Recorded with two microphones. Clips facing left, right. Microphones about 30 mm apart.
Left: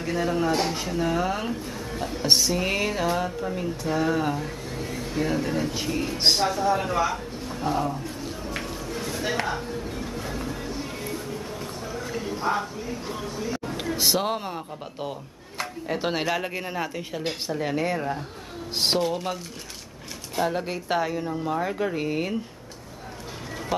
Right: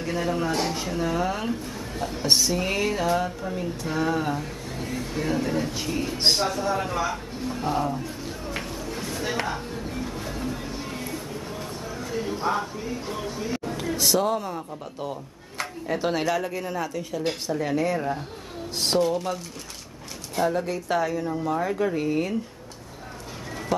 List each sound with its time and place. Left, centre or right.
0.0 s a man's voice: centre
8.5 s a sound: centre
9.2 s a man's voice: centre
12.4 s speech: centre
13.7 s speech: left
15.0 s speech: centre
17.3 s speech: centre
17.9 s a man's voice: centre
18.8 s speech: left
20.4 s speech: left